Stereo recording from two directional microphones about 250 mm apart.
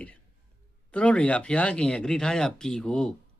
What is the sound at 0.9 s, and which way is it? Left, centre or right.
Speech, centre.